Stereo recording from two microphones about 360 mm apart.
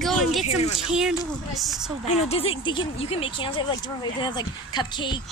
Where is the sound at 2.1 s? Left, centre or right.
Centre.